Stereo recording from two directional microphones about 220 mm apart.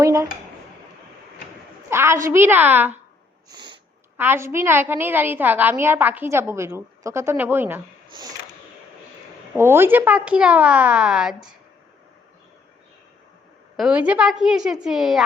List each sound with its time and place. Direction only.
0.0 s a sound: 15° right (ahead or behind)
1.9 s a woman's voice: 10° right (ahead or behind)
3.5 s a sound: 20° right (ahead or behind)
4.2 s a woman's voice: 10° right (ahead or behind)
9.6 s speech: 10° right (ahead or behind)
13.7 s speech: 5° right (ahead or behind)